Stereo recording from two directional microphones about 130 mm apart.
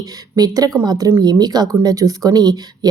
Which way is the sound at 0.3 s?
30° right (ahead or behind).